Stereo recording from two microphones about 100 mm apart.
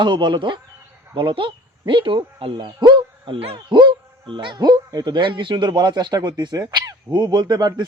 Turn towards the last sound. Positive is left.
turn(degrees=-45)  # may be behind; listen again after turning